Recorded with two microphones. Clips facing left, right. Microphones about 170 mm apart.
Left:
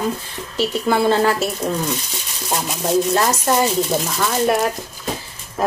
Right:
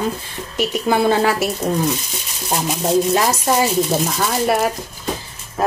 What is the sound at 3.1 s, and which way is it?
A woman's voice, 10° right (ahead or behind).